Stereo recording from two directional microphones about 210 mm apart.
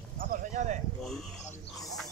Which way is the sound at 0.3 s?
35° right (ahead or behind).